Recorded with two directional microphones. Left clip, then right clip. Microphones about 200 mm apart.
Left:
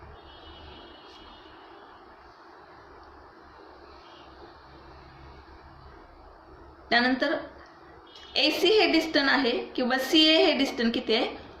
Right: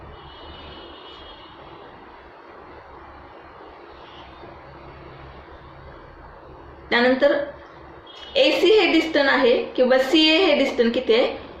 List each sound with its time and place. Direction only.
6.8 s speech: 30° left (ahead or behind)
8.4 s a woman's voice: 30° left (ahead or behind)